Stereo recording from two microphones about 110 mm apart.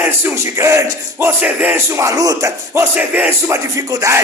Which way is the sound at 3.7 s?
30° right (ahead or behind).